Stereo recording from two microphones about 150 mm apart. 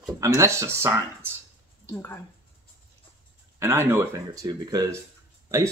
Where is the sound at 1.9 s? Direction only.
15° left (ahead or behind).